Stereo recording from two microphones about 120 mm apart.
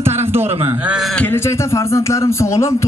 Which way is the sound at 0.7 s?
10° right (ahead or behind).